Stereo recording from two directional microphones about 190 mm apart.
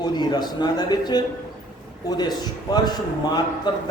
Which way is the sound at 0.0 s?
20° left (ahead or behind).